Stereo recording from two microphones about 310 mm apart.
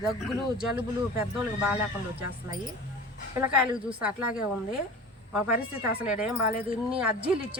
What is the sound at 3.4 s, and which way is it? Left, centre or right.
Speech, centre.